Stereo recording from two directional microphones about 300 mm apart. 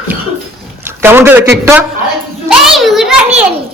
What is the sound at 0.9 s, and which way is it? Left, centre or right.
Speech, centre.